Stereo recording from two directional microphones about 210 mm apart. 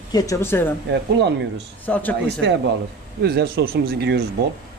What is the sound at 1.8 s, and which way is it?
Speech, 10° left (ahead or behind).